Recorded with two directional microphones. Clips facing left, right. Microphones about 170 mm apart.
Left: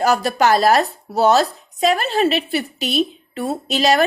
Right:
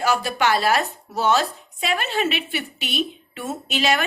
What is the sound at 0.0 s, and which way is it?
Speech, 40° left (ahead or behind).